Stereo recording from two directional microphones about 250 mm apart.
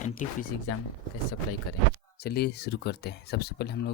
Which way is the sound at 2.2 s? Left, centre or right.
Left.